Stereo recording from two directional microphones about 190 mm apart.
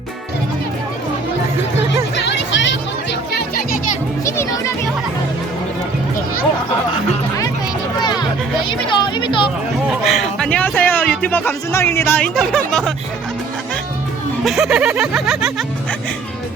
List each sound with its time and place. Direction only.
2.1 s music: 65° left (ahead or behind)
4.3 s children playing: 15° left (ahead or behind)
7.9 s music: 20° left (ahead or behind)
8.9 s speech: 25° left (ahead or behind)
10.0 s speech: centre (ahead or behind)
14.4 s music: centre (ahead or behind)